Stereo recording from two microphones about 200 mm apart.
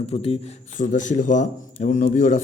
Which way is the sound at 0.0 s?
30° left (ahead or behind).